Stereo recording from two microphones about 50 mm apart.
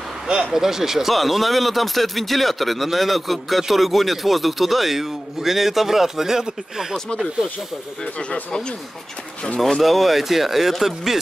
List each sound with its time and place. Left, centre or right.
0.3 s speech: centre
8.0 s speech: left
9.6 s speech: centre